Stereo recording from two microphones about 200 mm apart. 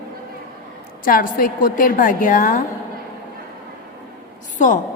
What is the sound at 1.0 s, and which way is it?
A woman's voice, 45° left (ahead or behind).